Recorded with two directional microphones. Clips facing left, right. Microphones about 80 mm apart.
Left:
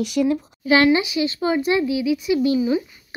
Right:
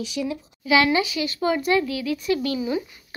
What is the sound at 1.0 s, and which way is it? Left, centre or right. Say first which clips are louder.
Speech: left 2 dB; left.